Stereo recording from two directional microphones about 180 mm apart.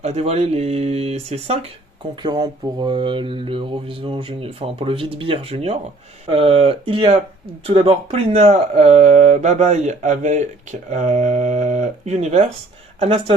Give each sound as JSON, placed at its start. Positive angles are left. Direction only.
{"t": 0.0, "sound": "speech", "side_deg": -35}
{"t": 2.2, "sound": "mantra", "side_deg": -25}
{"t": 6.2, "sound": "speech", "side_deg": -30}